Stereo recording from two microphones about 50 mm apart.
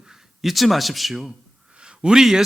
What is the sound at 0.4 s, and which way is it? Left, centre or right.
A man's voice, centre.